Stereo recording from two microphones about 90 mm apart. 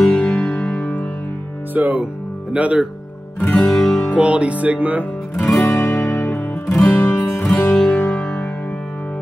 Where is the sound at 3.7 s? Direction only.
5° left (ahead or behind).